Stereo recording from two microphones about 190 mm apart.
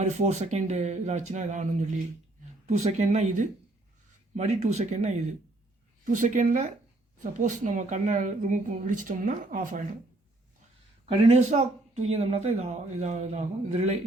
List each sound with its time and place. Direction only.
0.0 s speech: 35° right (ahead or behind)
11.2 s speech: 35° right (ahead or behind)